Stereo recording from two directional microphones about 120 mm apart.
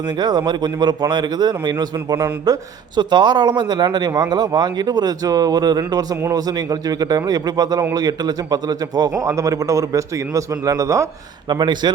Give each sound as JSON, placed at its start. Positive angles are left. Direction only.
{"t": 0.2, "sound": "a man's voice", "side_deg": -35}
{"t": 11.4, "sound": "a man's voice", "side_deg": -40}